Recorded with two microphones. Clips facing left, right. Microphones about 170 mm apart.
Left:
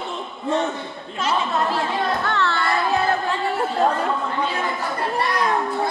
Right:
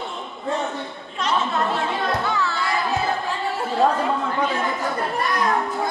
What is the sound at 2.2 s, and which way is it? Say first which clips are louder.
Music: left 2 dB; 70° left (ahead or behind).